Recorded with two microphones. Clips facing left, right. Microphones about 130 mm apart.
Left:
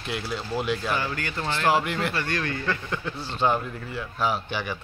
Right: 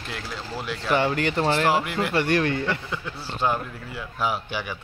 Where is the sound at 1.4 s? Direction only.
35° right (ahead or behind).